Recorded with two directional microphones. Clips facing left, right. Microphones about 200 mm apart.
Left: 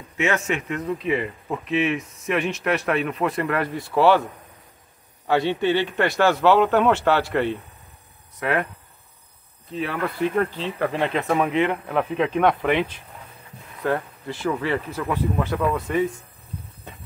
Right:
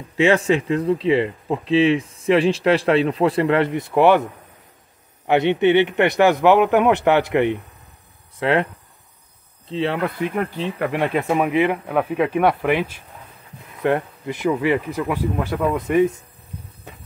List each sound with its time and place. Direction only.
0.2 s speech: 30° right (ahead or behind)
9.7 s speech: 25° right (ahead or behind); by 13.0 s 10° right (ahead or behind)
13.8 s speech: 20° right (ahead or behind)